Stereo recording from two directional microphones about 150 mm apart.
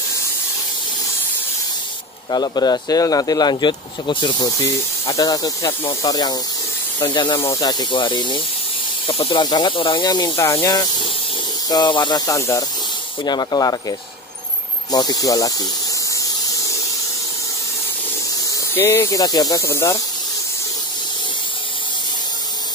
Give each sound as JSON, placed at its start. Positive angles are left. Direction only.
{"t": 2.3, "sound": "speech", "side_deg": 25}
{"t": 18.8, "sound": "speech", "side_deg": 15}